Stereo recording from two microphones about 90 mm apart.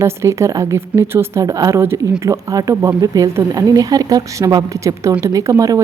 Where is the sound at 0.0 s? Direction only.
35° right (ahead or behind).